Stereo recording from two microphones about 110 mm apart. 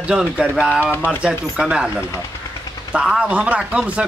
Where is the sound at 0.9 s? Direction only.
20° left (ahead or behind).